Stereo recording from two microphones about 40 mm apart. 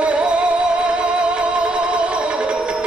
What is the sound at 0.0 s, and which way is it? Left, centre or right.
Music, right.